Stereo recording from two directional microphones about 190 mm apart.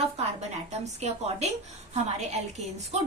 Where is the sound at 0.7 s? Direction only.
35° right (ahead or behind).